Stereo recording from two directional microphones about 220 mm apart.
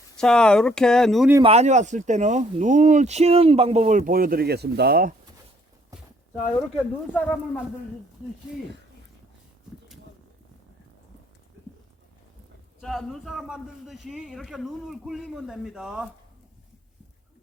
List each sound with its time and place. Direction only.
0.2 s a man's voice: 5° left (ahead or behind)
1.4 s speech: 30° right (ahead or behind); by 5.1 s 45° right (ahead or behind)
7.1 s speech: 5° left (ahead or behind)
12.8 s a man's voice: centre (ahead or behind)